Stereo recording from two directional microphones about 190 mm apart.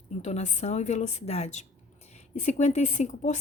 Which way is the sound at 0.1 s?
35° left (ahead or behind).